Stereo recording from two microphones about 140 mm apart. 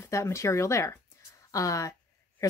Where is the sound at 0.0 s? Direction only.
20° left (ahead or behind).